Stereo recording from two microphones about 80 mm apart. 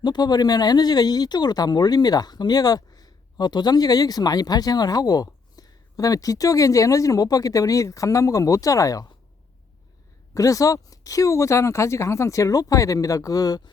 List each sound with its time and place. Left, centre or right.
0.0 s speech: left
10.3 s speech: left